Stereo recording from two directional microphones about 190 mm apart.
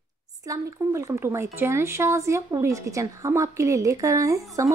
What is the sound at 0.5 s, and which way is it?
Speech, 15° right (ahead or behind).